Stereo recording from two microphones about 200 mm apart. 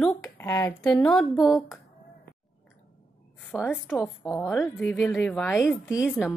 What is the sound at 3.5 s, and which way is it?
Speech, centre (ahead or behind).